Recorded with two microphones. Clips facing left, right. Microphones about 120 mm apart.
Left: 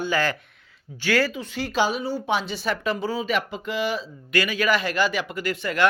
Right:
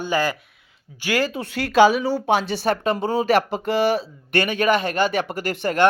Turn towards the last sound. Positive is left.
turn(degrees=-40)  # may be behind; listen again after turning